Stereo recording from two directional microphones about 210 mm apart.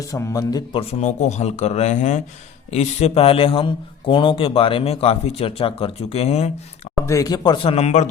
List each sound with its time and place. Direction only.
0.1 s a man's voice: 15° left (ahead or behind); by 6.5 s 30° left (ahead or behind)
6.9 s a man's voice: 15° left (ahead or behind); by 8.0 s 30° left (ahead or behind)